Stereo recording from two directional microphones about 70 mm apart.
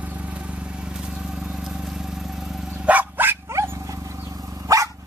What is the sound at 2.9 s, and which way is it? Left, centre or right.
Dog, right.